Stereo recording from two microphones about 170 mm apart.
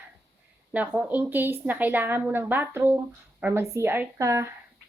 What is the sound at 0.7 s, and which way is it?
A woman's voice, 10° right (ahead or behind).